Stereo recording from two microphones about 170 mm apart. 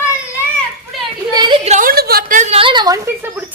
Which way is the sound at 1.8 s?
65° right (ahead or behind).